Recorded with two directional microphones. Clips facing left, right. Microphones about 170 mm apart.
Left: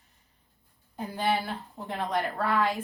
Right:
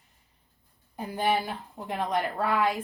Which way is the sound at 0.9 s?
15° right (ahead or behind).